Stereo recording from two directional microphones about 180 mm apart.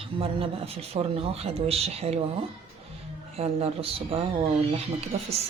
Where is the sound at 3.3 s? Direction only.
35° right (ahead or behind).